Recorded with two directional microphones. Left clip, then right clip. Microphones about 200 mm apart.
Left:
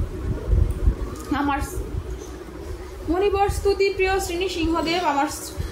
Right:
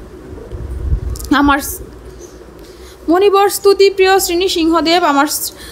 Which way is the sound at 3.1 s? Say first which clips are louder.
Right 11 dB; 50° right (ahead or behind).